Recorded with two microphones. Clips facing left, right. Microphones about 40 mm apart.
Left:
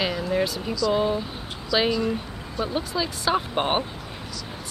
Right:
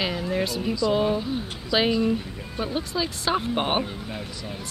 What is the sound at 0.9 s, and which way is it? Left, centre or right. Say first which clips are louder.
Speech: even; centre.